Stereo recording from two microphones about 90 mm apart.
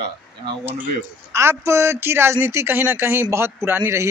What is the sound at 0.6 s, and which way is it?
Speech, 20° right (ahead or behind).